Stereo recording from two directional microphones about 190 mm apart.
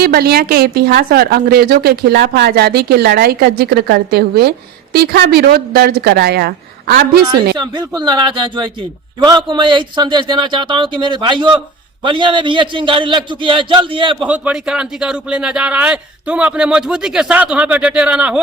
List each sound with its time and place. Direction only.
0.0 s a woman's voice: 55° right (ahead or behind)
7.5 s a man's voice: 20° right (ahead or behind)
14.2 s speech: 5° right (ahead or behind)